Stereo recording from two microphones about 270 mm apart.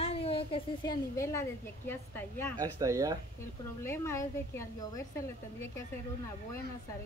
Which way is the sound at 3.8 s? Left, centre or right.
Centre.